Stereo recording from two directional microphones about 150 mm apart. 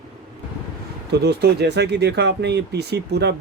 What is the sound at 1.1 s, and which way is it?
Speech, 90° right.